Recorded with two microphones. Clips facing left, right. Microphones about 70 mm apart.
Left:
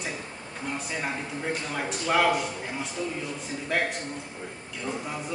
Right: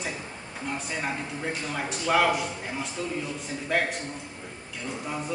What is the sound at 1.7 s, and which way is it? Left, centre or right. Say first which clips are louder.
Speech: right 1 dB; centre.